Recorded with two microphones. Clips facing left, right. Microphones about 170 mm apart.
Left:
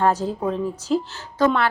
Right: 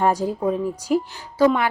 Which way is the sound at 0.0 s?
10° right (ahead or behind).